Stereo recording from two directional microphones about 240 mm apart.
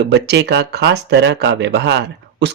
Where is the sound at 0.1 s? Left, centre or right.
Right.